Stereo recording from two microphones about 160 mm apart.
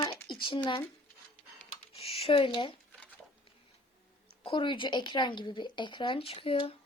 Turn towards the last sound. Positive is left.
turn(degrees=35)  # may be behind; listen again after turning